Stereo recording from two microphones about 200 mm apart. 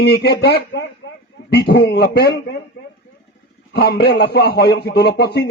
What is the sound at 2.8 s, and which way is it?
Vehicle, 55° left (ahead or behind).